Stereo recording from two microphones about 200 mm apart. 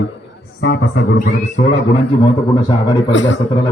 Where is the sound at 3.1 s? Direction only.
65° left (ahead or behind).